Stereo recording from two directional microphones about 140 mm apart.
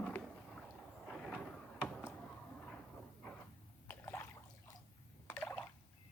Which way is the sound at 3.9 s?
15° left (ahead or behind).